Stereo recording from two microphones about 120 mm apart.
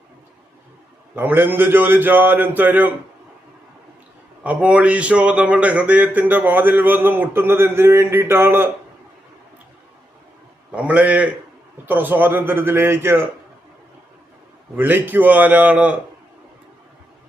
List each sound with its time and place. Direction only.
1.1 s speech: 15° right (ahead or behind)
4.4 s speech: 10° right (ahead or behind)
10.7 s speech: 10° right (ahead or behind)
14.8 s speech: 15° right (ahead or behind)